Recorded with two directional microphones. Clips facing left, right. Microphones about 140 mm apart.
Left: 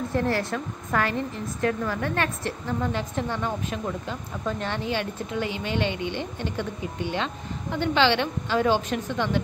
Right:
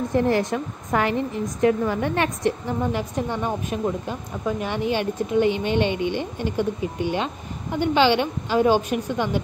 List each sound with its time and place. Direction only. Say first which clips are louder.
0.1 s a woman's voice: right 5 dB; 15° right (ahead or behind)